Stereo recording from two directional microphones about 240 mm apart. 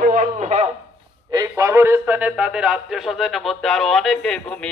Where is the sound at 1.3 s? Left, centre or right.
Centre.